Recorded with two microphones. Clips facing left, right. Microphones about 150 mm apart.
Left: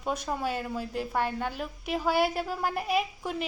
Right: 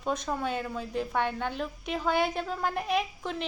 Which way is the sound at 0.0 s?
10° left (ahead or behind).